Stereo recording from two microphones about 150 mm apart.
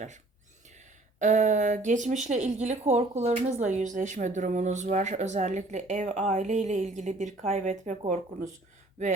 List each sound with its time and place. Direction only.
1.2 s speech: 55° right (ahead or behind)